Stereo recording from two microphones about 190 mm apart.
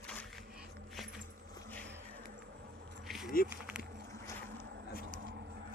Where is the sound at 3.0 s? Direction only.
Centre (ahead or behind).